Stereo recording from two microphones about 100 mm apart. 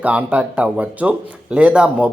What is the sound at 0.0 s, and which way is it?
A man's voice, 15° right (ahead or behind).